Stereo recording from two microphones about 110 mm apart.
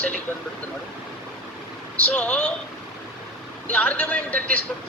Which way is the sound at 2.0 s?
10° left (ahead or behind).